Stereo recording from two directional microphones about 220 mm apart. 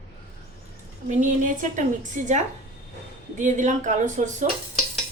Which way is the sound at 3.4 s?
35° right (ahead or behind).